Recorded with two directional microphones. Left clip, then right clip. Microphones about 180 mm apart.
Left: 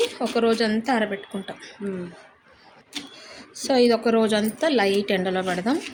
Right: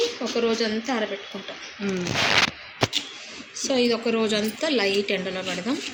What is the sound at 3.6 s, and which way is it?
A woman's voice, 60° left (ahead or behind).